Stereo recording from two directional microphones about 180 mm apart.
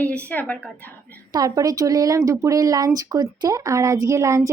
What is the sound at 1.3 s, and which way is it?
Speech, 20° right (ahead or behind).